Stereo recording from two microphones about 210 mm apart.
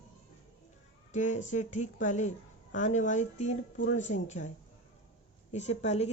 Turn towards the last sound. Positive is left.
turn(degrees=30)  # may be behind; listen again after turning